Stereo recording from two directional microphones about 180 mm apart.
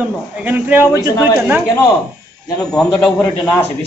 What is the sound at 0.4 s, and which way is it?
Speech, 10° right (ahead or behind).